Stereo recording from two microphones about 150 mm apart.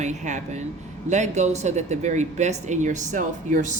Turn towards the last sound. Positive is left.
turn(degrees=-55)  # may be behind; listen again after turning